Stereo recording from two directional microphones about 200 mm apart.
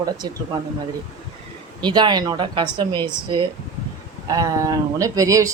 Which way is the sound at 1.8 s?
20° right (ahead or behind).